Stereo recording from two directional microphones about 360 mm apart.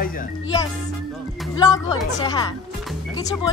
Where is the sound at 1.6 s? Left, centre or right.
Centre.